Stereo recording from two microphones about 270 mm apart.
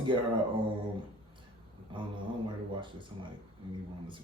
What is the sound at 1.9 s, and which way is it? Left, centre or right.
Speech, centre.